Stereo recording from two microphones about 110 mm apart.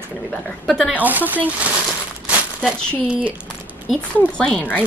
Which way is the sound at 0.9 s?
15° right (ahead or behind).